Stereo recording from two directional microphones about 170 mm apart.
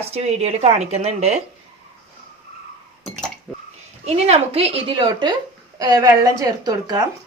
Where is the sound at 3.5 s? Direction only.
Centre (ahead or behind).